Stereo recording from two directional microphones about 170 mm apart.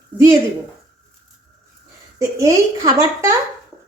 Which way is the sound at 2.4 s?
20° right (ahead or behind).